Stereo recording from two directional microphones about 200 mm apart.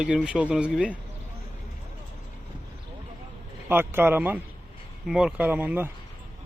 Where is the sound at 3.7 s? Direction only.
10° right (ahead or behind).